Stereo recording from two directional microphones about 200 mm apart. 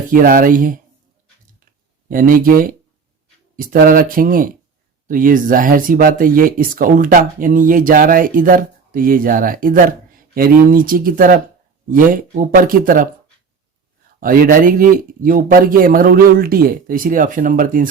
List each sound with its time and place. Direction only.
0.1 s speech: 45° right (ahead or behind)
2.0 s speech: 45° right (ahead or behind)
14.2 s speech: 45° right (ahead or behind)